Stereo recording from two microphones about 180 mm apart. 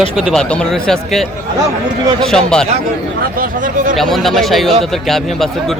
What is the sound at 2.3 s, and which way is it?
Speech, 5° left (ahead or behind).